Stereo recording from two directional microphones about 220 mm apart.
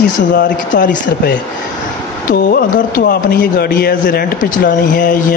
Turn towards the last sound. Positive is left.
turn(degrees=40)  # may be behind; listen again after turning